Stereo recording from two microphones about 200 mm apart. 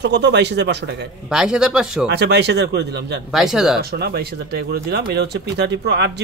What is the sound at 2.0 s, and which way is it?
Speech, 60° right (ahead or behind).